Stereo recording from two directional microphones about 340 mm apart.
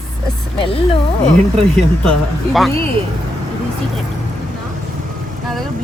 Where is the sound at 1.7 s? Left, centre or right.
Centre.